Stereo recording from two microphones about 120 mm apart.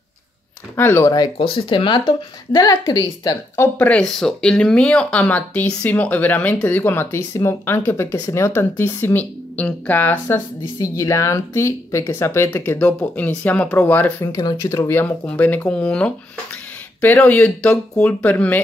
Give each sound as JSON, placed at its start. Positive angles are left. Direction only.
{"t": 0.7, "sound": "speech", "side_deg": 20}
{"t": 1.4, "sound": "speech", "side_deg": 45}
{"t": 3.5, "sound": "speech", "side_deg": 15}
{"t": 14.2, "sound": "speech", "side_deg": 30}
{"t": 14.8, "sound": "speech", "side_deg": 20}
{"t": 17.3, "sound": "speech", "side_deg": 10}